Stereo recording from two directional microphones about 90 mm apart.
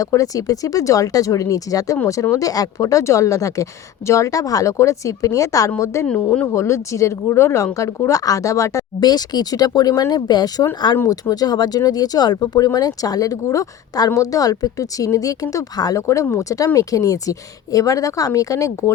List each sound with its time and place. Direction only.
0.0 s a woman's voice: 40° left (ahead or behind)
9.0 s a woman's voice: 50° left (ahead or behind)